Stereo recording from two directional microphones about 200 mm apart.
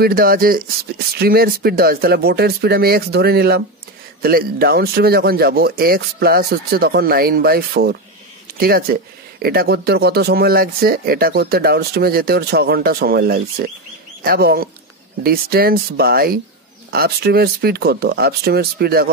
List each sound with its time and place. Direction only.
0.0 s speech: 45° right (ahead or behind)